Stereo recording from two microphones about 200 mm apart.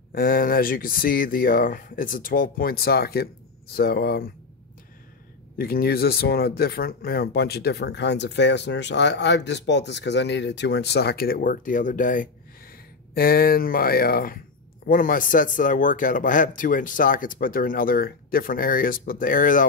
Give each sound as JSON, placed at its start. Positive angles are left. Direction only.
{"t": 0.1, "sound": "speech", "side_deg": 45}
{"t": 5.6, "sound": "speech", "side_deg": 50}